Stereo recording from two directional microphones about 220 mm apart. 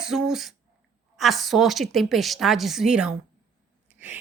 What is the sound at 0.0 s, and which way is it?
A woman's voice, centre (ahead or behind).